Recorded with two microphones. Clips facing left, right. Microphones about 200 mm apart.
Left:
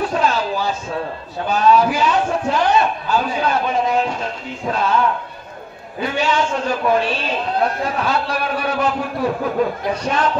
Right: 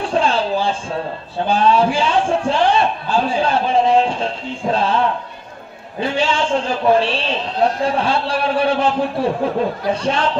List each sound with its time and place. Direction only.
0.0 s music: 30° right (ahead or behind)
1.5 s a man's voice: 30° right (ahead or behind)